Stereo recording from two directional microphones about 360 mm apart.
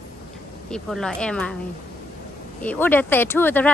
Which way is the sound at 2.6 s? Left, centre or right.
Centre.